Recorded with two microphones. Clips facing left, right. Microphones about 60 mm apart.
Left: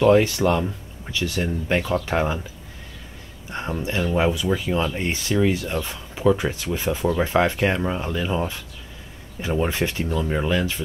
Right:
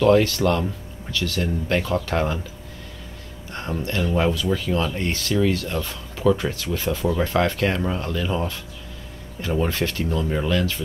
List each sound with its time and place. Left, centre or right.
0.0 s speech: centre
3.4 s speech: centre